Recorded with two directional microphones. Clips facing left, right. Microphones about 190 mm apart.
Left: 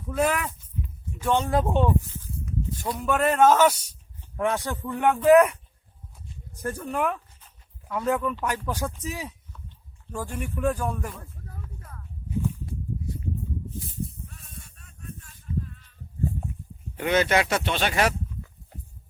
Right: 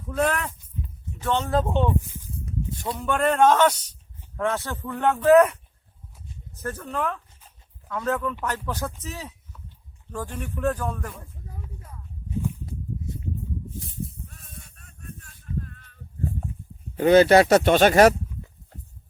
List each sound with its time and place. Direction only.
0.1 s a man's voice: 10° left (ahead or behind)
2.1 s a sound: 20° right (ahead or behind)
3.0 s a man's voice: 5° left (ahead or behind)
6.6 s a man's voice: 10° left (ahead or behind)
11.4 s a sound: 20° right (ahead or behind)
14.3 s sheep: 50° right (ahead or behind)
17.0 s speech: 35° right (ahead or behind)